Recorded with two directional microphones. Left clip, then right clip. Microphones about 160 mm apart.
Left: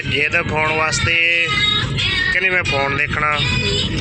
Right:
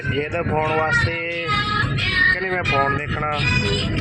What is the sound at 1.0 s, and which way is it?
Music, 5° right (ahead or behind).